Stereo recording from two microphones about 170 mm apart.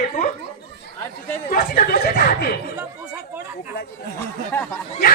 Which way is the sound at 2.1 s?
65° left (ahead or behind).